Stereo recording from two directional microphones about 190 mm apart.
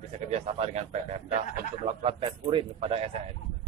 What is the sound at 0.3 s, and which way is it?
A man's voice, 35° right (ahead or behind).